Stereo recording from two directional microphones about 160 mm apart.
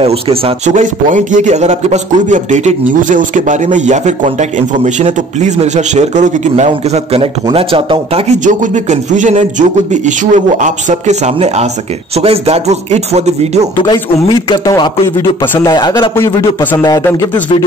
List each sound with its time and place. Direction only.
0.0 s a man's voice: 35° right (ahead or behind)
8.5 s a man's voice: 50° right (ahead or behind)
14.5 s a man's voice: 25° left (ahead or behind)
15.6 s a man's voice: 25° left (ahead or behind)